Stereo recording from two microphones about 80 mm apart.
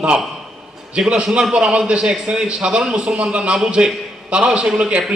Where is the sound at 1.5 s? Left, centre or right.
Centre.